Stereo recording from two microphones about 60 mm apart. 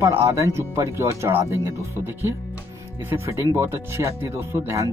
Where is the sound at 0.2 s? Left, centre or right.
Right.